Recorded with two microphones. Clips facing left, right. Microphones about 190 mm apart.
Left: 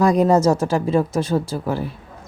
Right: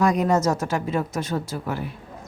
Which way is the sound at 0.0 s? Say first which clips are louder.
Left 5 dB; 35° left (ahead or behind).